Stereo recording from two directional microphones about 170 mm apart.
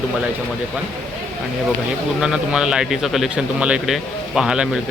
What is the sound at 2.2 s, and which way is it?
Speech, 5° right (ahead or behind).